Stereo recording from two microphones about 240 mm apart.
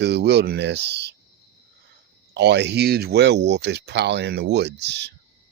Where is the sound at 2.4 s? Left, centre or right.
Right.